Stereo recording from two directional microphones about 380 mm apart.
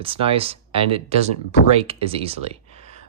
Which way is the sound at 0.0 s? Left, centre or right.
Centre.